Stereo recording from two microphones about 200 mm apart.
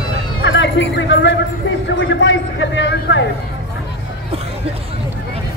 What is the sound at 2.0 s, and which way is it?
A man's voice, 70° left (ahead or behind).